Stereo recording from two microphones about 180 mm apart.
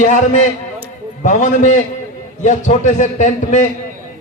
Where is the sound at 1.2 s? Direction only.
40° left (ahead or behind).